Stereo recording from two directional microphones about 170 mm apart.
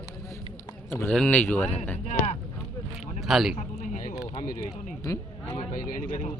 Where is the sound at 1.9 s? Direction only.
40° left (ahead or behind).